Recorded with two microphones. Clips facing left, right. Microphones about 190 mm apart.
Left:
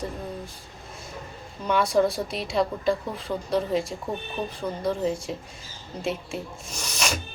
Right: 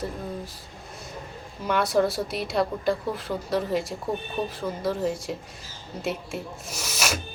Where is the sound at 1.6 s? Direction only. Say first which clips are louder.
Left 1 dB; 5° right (ahead or behind).